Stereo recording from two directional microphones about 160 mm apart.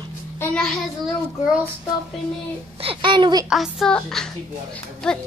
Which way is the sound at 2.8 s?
30° right (ahead or behind).